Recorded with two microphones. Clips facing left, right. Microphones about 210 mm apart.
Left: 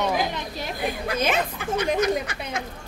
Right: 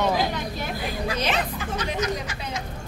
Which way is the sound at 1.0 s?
50° left (ahead or behind).